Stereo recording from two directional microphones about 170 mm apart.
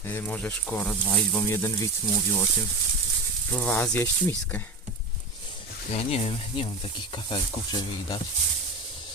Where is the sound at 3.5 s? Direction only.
10° left (ahead or behind).